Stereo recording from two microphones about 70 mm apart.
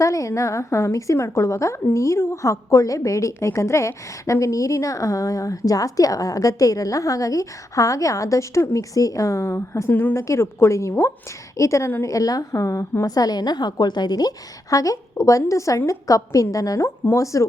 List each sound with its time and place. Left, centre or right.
0.0 s a woman's voice: left
9.9 s speech: left
10.2 s a woman's voice: left
13.1 s a woman's voice: left